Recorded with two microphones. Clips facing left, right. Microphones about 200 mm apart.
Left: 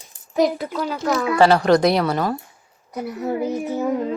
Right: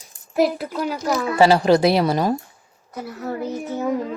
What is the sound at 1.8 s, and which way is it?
Speech, 25° right (ahead or behind).